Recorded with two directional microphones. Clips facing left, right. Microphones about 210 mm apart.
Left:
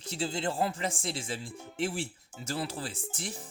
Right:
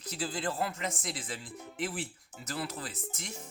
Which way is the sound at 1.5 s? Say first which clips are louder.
Even; centre (ahead or behind).